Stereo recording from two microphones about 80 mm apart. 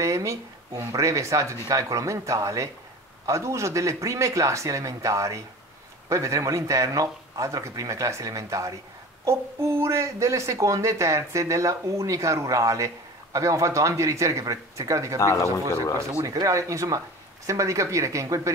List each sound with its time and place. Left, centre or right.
0.0 s a woman's voice: right
15.1 s speech: left
16.2 s a woman's voice: right